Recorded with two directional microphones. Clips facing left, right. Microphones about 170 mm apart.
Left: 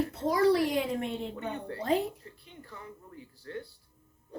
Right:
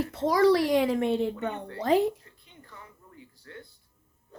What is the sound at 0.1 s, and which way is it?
A woman's voice, 90° right.